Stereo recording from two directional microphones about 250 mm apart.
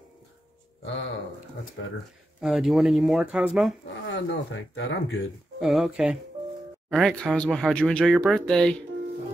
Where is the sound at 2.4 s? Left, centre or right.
Centre.